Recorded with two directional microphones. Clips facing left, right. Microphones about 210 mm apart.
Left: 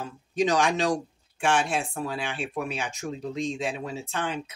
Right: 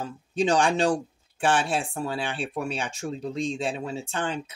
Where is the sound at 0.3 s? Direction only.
30° right (ahead or behind).